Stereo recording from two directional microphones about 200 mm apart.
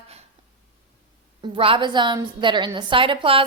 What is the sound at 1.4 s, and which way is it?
A woman's voice, 25° right (ahead or behind).